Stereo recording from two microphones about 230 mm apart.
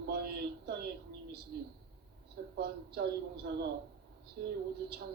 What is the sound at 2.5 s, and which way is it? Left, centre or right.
Speech, right.